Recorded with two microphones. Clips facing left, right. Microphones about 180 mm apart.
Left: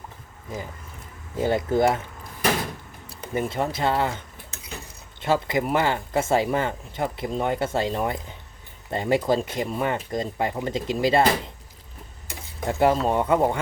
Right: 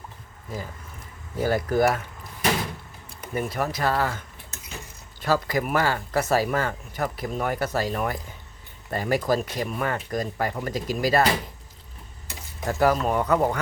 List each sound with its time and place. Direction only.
1.4 s speech: 20° left (ahead or behind)
3.2 s speech: 30° left (ahead or behind)
5.2 s speech: 25° left (ahead or behind)
12.6 s speech: 25° left (ahead or behind)